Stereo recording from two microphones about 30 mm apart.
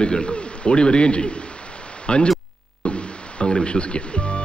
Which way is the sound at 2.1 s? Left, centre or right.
Left.